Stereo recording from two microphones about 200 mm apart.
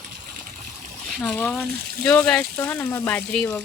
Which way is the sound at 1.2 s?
10° left (ahead or behind).